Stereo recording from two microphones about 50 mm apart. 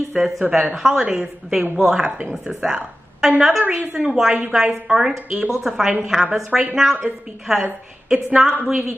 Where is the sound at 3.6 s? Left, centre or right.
Centre.